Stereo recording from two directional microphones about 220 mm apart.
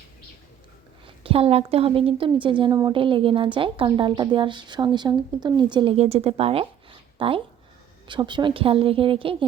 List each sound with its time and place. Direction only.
1.0 s a woman's voice: 25° right (ahead or behind)